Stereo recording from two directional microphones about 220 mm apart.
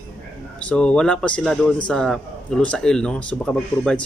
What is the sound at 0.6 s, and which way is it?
A man's voice, 5° left (ahead or behind).